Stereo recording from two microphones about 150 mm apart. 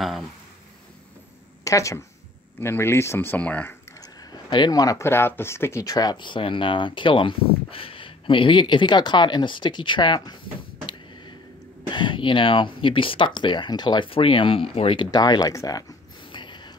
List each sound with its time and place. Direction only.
1.6 s a woman's voice: 20° left (ahead or behind)
4.0 s speech: 30° left (ahead or behind)
11.9 s speech: 30° left (ahead or behind)
15.0 s speech: 25° left (ahead or behind)
16.3 s a sound: 30° left (ahead or behind)